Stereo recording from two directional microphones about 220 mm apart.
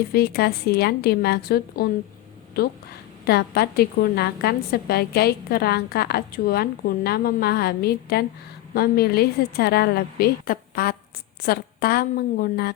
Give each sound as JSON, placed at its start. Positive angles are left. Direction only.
{"t": 0.1, "sound": "a woman's voice", "side_deg": 45}